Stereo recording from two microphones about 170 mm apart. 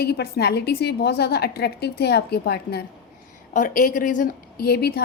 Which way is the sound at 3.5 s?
50° left (ahead or behind).